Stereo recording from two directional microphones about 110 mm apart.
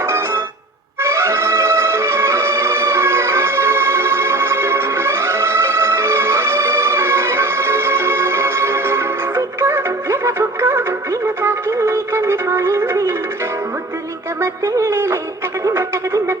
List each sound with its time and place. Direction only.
1.0 s music: 25° right (ahead or behind)
14.4 s music: 25° right (ahead or behind)